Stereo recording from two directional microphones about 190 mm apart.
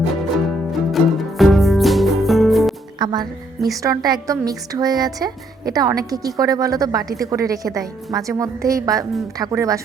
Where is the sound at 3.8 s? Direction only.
20° right (ahead or behind).